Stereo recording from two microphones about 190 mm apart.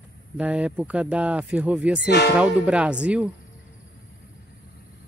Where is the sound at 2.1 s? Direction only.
60° left (ahead or behind).